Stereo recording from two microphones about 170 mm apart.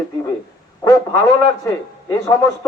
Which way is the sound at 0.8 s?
20° left (ahead or behind).